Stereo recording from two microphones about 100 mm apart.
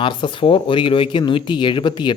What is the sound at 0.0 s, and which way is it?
Speech, 55° left (ahead or behind).